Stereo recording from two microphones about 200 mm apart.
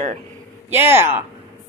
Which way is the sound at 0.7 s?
10° right (ahead or behind).